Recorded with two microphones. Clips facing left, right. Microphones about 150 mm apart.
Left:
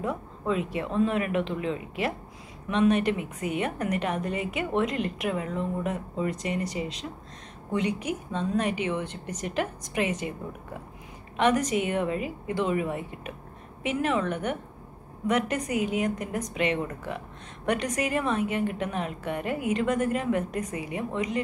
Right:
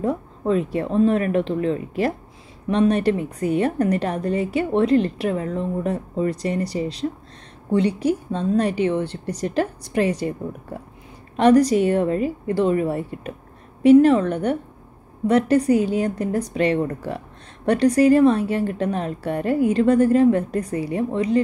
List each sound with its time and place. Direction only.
0.0 s a woman's voice: 40° right (ahead or behind)